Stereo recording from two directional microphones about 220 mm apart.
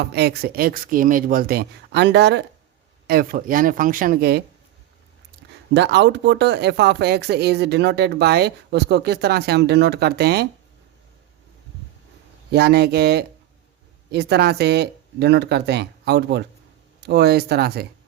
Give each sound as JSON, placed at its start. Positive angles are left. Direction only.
{"t": 0.0, "sound": "speech", "side_deg": -50}
{"t": 5.7, "sound": "speech", "side_deg": -50}
{"t": 12.5, "sound": "speech", "side_deg": -45}